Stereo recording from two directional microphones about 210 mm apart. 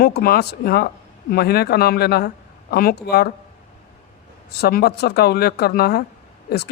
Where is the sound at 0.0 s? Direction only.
45° left (ahead or behind).